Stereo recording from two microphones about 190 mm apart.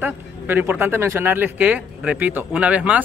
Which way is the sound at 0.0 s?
10° right (ahead or behind).